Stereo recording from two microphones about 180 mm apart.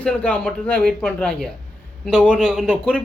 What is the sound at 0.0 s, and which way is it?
Speech, 5° left (ahead or behind).